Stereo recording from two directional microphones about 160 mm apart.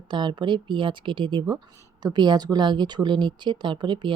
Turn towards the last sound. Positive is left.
turn(degrees=-30)  # may be behind; listen again after turning